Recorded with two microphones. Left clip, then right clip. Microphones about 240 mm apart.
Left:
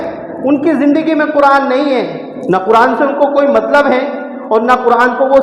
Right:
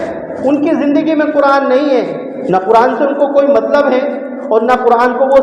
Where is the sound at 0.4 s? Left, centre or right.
Left.